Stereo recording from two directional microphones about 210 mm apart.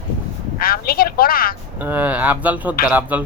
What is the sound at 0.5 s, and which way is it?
A woman's voice, 45° left (ahead or behind).